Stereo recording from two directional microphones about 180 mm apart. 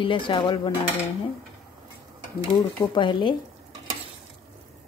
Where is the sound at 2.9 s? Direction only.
25° left (ahead or behind).